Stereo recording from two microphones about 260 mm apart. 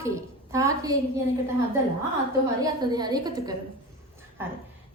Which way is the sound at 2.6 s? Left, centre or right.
Centre.